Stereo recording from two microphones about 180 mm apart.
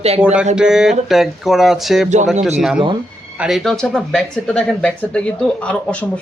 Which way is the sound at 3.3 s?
5° right (ahead or behind).